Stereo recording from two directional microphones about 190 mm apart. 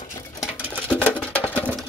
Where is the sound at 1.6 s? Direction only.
10° right (ahead or behind).